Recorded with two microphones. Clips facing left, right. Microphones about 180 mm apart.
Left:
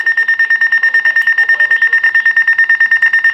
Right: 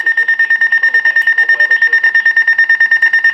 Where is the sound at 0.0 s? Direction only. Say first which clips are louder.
Even; 30° right (ahead or behind).